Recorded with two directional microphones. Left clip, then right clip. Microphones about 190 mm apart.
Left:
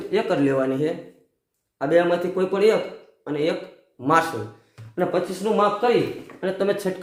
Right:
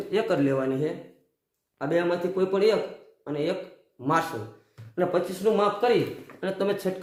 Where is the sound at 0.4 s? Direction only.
10° left (ahead or behind).